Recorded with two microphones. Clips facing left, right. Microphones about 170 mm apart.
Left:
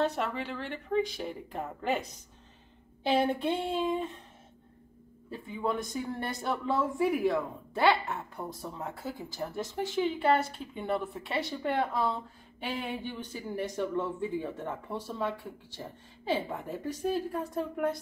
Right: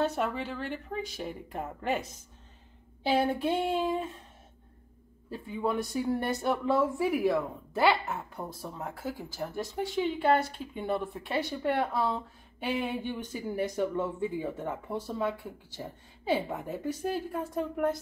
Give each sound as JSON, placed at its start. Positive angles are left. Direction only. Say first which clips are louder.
{"t": 0.0, "sound": "a woman's voice", "louder": "right 1 dB", "side_deg": -5}
{"t": 3.1, "sound": "a woman's voice", "louder": "even", "side_deg": -5}
{"t": 5.3, "sound": "a woman's voice", "louder": "right 2 dB", "side_deg": -5}